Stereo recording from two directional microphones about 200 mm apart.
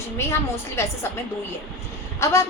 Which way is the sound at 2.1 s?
15° left (ahead or behind).